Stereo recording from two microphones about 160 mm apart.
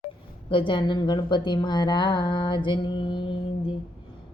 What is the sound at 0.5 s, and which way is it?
A woman's voice, 30° left (ahead or behind).